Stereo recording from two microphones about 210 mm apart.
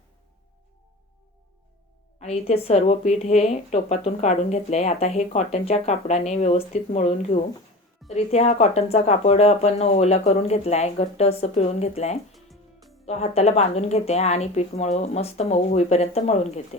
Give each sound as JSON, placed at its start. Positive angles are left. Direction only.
{"t": 2.1, "sound": "a woman's voice", "side_deg": 30}
{"t": 12.3, "sound": "music", "side_deg": 0}
{"t": 13.1, "sound": "a woman's voice", "side_deg": 30}